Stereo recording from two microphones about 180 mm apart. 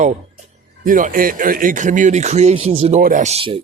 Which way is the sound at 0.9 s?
50° right (ahead or behind).